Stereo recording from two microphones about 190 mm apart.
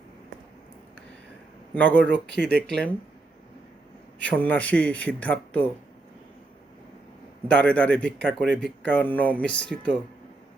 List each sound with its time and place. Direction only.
1.7 s speech: 10° left (ahead or behind)
2.4 s speech: 65° right (ahead or behind)
2.6 s speech: 5° left (ahead or behind)
4.2 s speech: 10° left (ahead or behind)
7.4 s speech: 5° left (ahead or behind)